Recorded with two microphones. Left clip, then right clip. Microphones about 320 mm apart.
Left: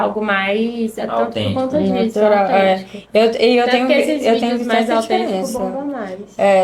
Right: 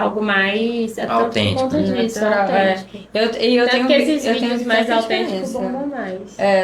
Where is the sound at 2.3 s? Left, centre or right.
Left.